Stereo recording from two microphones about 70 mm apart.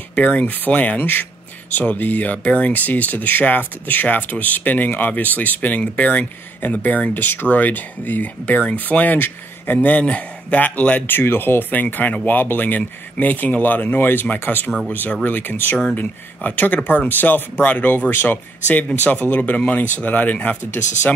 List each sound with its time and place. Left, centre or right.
0.1 s speech: left
11.1 s speech: left